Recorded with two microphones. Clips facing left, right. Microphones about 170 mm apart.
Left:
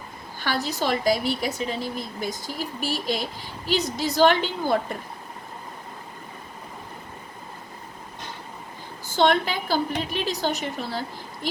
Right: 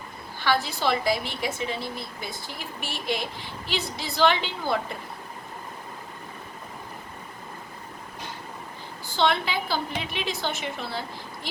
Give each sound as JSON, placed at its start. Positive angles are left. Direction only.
{"t": 0.3, "sound": "a woman's voice", "side_deg": 45}
{"t": 9.1, "sound": "a woman's voice", "side_deg": 45}